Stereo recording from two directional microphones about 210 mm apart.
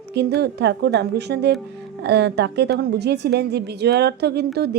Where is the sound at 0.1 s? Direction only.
50° right (ahead or behind).